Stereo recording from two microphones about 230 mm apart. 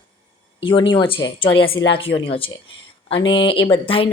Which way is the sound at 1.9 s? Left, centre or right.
Left.